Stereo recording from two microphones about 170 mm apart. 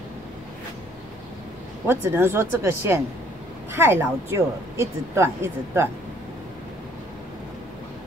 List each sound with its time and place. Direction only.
1.9 s speech: 15° right (ahead or behind)